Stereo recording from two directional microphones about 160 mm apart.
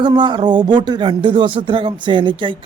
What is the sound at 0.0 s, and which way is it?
Speech, 30° right (ahead or behind).